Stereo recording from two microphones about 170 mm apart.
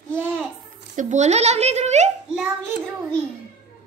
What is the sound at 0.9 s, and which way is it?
A woman's voice, 45° right (ahead or behind).